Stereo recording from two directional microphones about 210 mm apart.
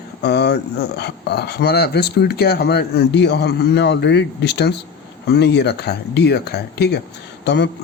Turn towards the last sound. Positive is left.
turn(degrees=55)  # may be behind; listen again after turning